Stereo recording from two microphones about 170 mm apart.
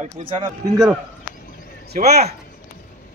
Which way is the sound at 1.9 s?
55° right (ahead or behind).